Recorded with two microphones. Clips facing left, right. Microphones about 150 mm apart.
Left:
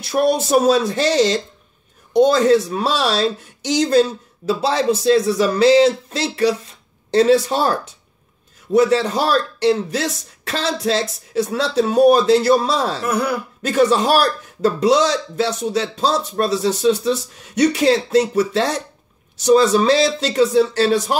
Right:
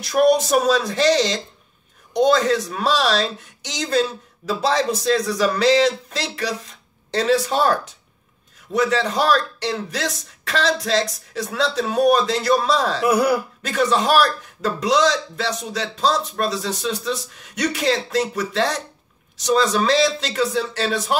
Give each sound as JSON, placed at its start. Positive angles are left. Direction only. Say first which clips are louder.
{"t": 0.0, "sound": "a man's voice", "louder": "right 1 dB", "side_deg": 30}
{"t": 13.0, "sound": "speech", "louder": "right 3 dB", "side_deg": -10}
{"t": 13.6, "sound": "speech", "louder": "left 4 dB", "side_deg": 35}